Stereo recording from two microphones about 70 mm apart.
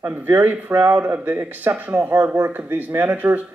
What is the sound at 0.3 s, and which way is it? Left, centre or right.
Speech, right.